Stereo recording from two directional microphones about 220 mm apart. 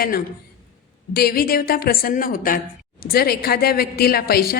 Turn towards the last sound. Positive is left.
turn(degrees=45)  # may be behind; listen again after turning